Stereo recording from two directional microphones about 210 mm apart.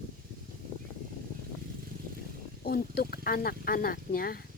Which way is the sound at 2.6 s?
45° left (ahead or behind).